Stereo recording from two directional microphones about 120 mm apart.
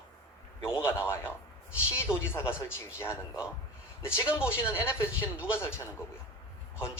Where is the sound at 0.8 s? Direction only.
20° left (ahead or behind).